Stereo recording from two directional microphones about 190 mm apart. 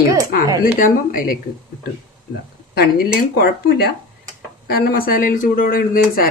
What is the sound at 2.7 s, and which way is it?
Speech, 55° left (ahead or behind).